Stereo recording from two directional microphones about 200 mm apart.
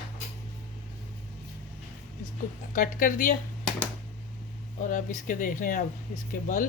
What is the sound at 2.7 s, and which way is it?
Speech, 40° left (ahead or behind).